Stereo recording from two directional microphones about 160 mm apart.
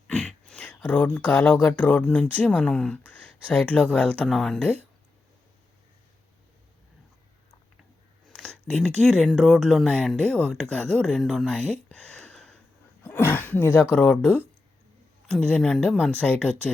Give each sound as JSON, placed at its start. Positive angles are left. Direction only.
{"t": 0.1, "sound": "speech", "side_deg": 5}
{"t": 8.4, "sound": "speech", "side_deg": 0}